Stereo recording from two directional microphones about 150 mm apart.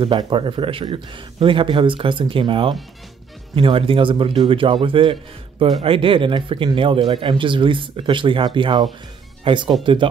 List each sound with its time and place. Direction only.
0.0 s speech: 35° right (ahead or behind)